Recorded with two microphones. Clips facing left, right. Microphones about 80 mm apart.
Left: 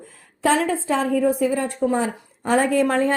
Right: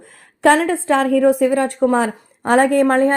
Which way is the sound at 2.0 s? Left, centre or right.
Right.